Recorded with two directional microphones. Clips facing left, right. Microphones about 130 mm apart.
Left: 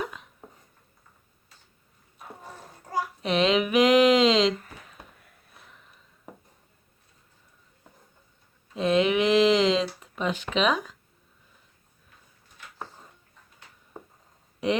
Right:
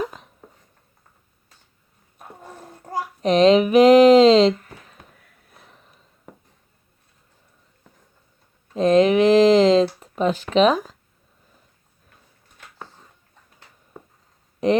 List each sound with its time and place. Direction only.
0.0 s hiccup: 35° right (ahead or behind)
3.2 s speech: 40° right (ahead or behind)
8.7 s speech: 40° right (ahead or behind)
14.6 s speech: 40° right (ahead or behind)